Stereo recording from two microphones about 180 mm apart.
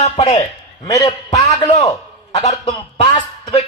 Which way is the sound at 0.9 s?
20° left (ahead or behind).